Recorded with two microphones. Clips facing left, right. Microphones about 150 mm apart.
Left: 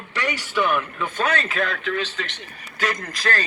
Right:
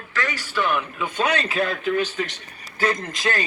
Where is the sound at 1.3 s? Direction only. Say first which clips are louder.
Right 1 dB; 30° right (ahead or behind).